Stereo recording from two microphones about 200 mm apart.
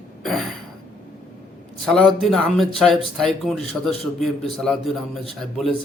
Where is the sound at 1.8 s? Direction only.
Centre (ahead or behind).